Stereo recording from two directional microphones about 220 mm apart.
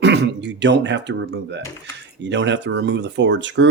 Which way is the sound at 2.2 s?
55° right (ahead or behind).